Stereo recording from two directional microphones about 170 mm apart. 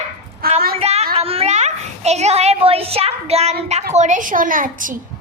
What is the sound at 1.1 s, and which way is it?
A child's voice, 35° right (ahead or behind).